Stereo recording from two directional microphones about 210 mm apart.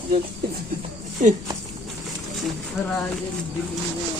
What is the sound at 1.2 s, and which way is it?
Speech, 35° right (ahead or behind).